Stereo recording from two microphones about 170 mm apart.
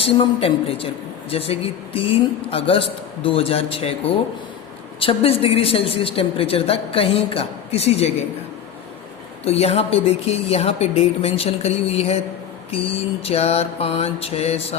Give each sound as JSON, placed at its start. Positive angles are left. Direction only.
{"t": 0.0, "sound": "a woman's voice", "side_deg": 35}
{"t": 4.9, "sound": "a woman's voice", "side_deg": 35}
{"t": 9.4, "sound": "a woman's voice", "side_deg": 35}